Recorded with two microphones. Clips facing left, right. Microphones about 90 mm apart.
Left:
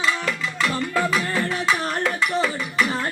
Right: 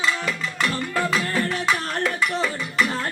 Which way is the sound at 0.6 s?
10° left (ahead or behind).